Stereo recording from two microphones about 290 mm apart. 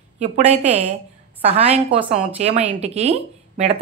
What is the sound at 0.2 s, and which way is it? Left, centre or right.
A woman's voice, right.